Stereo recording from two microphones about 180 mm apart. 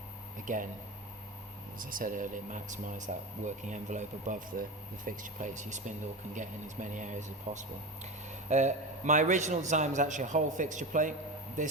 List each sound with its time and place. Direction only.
0.4 s speech: 45° right (ahead or behind)
2.0 s speech: 50° right (ahead or behind)